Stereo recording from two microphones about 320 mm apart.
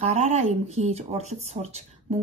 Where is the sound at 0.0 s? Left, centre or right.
Centre.